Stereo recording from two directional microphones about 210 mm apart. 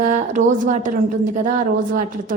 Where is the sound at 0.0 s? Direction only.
35° right (ahead or behind).